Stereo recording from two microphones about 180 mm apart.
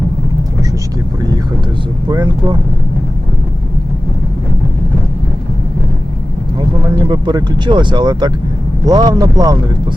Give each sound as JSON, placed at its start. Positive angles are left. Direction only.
{"t": 2.0, "sound": "speech", "side_deg": -25}
{"t": 6.9, "sound": "speech", "side_deg": -25}